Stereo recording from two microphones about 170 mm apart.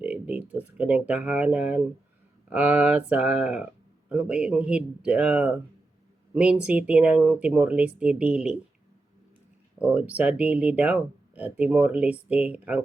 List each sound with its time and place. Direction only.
0.0 s speech: 10° right (ahead or behind)
9.7 s speech: 10° right (ahead or behind)